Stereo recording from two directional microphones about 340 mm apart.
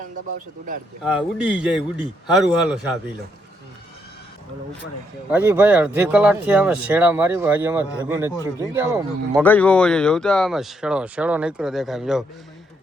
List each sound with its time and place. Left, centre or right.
1.0 s speech: centre
5.3 s speech: centre
9.4 s speech: centre